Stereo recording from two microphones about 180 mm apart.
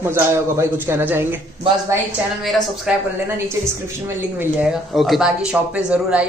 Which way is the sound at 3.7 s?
10° right (ahead or behind).